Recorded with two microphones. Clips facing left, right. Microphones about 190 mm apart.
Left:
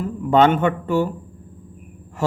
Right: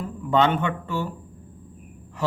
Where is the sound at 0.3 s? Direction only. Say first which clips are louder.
Left 5 dB; 45° left (ahead or behind).